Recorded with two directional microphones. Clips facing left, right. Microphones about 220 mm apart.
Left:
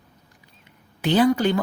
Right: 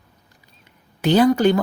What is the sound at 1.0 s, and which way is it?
Speech, 40° right (ahead or behind).